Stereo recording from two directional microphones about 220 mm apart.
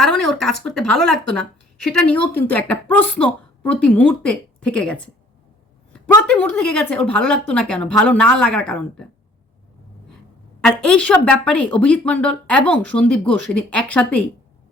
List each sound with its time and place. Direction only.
0.0 s a woman's voice: centre (ahead or behind)
6.2 s a woman's voice: 5° left (ahead or behind)
10.6 s a woman's voice: 5° left (ahead or behind)